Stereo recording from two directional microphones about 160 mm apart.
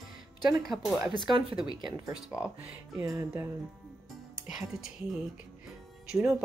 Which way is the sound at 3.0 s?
20° right (ahead or behind).